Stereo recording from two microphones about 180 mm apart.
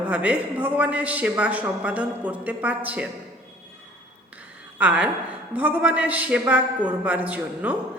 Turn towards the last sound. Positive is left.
turn(degrees=-10)  # may be behind; listen again after turning